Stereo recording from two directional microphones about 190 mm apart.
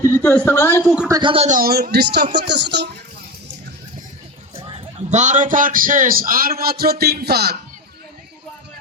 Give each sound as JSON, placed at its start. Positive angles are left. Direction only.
{"t": 0.0, "sound": "speech", "side_deg": 10}
{"t": 1.0, "sound": "speech", "side_deg": -20}
{"t": 1.5, "sound": "speech", "side_deg": -50}
{"t": 4.5, "sound": "a man's voice", "side_deg": -30}